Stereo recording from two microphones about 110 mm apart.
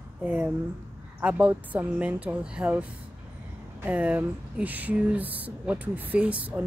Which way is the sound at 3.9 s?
15° right (ahead or behind).